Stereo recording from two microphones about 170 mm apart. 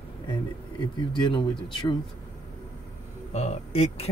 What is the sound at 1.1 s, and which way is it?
Speech, 30° left (ahead or behind).